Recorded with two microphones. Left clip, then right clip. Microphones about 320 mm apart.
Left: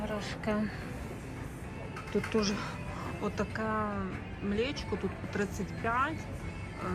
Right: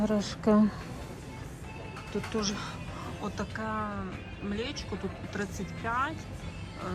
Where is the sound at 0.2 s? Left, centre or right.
Centre.